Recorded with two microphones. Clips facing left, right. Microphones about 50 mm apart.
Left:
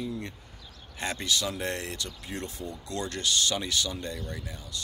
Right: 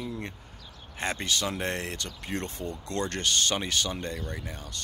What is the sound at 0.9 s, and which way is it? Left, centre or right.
Speech, right.